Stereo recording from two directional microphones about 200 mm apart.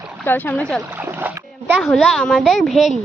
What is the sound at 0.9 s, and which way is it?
Speech, 10° right (ahead or behind).